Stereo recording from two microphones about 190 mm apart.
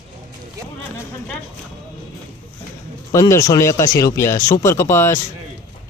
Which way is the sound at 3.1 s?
15° left (ahead or behind).